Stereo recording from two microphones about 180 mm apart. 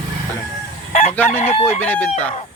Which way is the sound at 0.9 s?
40° left (ahead or behind).